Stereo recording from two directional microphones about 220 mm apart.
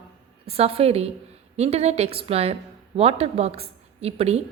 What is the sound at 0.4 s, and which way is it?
Speech, 25° right (ahead or behind).